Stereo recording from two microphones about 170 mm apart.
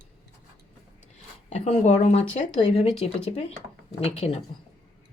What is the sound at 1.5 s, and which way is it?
Speech, 40° left (ahead or behind).